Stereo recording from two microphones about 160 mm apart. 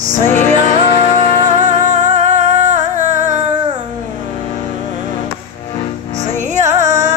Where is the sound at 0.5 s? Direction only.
50° left (ahead or behind).